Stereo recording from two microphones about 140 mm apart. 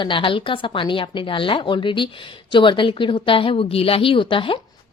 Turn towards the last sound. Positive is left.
turn(degrees=40)  # may be behind; listen again after turning